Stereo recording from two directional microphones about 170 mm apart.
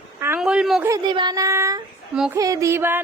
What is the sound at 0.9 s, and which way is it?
A woman's voice, 25° right (ahead or behind).